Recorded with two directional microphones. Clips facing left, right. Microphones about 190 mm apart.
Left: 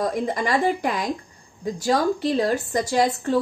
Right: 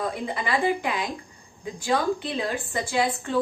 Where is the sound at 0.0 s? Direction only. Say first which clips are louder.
Left 5 dB; 40° left (ahead or behind).